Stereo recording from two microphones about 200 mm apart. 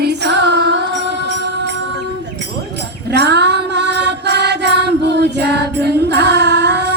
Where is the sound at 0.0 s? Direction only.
55° right (ahead or behind).